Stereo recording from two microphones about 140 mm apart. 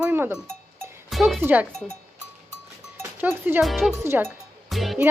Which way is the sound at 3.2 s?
10° right (ahead or behind).